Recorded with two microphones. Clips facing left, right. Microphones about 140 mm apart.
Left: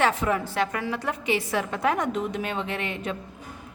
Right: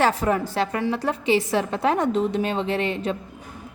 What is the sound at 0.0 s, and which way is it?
A woman's voice, 40° right (ahead or behind).